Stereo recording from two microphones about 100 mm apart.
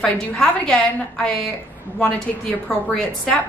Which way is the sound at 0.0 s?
5° left (ahead or behind).